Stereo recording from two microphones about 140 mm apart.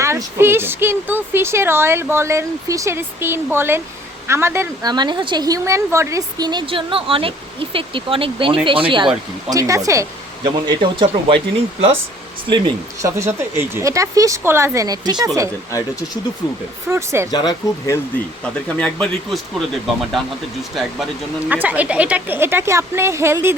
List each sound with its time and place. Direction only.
0.0 s speech: 20° right (ahead or behind)
4.9 s a woman's voice: 30° right (ahead or behind)
9.5 s speech: 25° right (ahead or behind)
10.4 s a woman's voice: 35° right (ahead or behind)
13.0 s speech: 20° right (ahead or behind)
16.9 s speech: 20° right (ahead or behind)
17.3 s speech: 30° left (ahead or behind)
18.8 s speech: 5° left (ahead or behind)
21.5 s speech: 10° right (ahead or behind)